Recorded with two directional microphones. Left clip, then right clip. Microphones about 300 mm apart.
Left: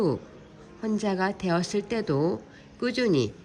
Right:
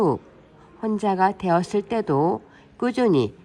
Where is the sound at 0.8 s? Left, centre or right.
Centre.